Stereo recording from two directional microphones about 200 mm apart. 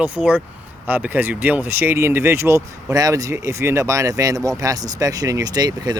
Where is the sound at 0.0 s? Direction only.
5° right (ahead or behind).